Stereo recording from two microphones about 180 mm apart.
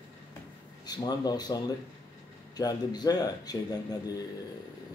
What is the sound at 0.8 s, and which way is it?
Speech, 20° left (ahead or behind).